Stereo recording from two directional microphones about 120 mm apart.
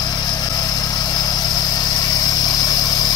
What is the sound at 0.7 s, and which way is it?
Vehicle, 35° left (ahead or behind).